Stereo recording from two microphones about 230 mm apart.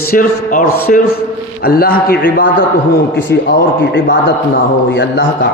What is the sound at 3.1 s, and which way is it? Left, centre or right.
A man's voice, left.